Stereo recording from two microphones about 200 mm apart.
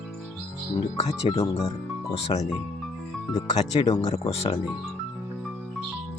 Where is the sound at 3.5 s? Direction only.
35° left (ahead or behind).